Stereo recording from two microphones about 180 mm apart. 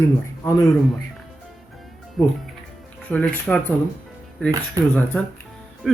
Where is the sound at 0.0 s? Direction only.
15° left (ahead or behind).